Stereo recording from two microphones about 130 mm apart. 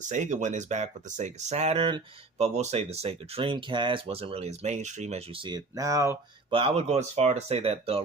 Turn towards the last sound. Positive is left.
turn(degrees=-50)  # may be behind; listen again after turning